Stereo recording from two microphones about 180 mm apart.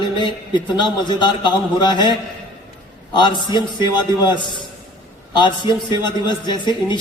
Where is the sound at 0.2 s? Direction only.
25° left (ahead or behind).